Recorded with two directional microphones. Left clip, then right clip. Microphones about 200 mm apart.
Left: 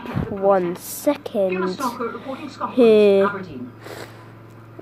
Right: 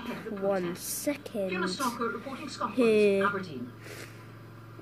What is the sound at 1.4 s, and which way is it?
Speech, 50° right (ahead or behind).